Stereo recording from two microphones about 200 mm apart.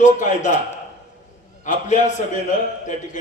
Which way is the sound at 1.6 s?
35° left (ahead or behind).